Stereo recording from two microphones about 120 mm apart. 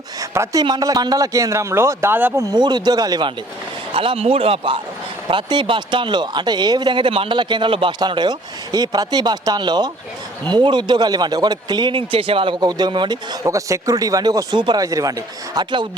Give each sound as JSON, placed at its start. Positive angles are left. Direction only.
{"t": 0.2, "sound": "a man's voice", "side_deg": -30}
{"t": 2.5, "sound": "speech", "side_deg": -40}
{"t": 3.9, "sound": "speech", "side_deg": -50}
{"t": 13.4, "sound": "a man's voice", "side_deg": -25}